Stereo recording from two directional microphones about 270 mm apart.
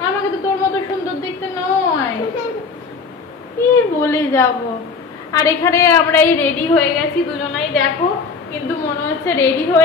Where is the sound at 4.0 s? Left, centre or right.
Centre.